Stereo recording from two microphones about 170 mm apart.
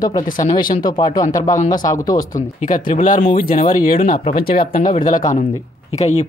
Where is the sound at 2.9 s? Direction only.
50° left (ahead or behind).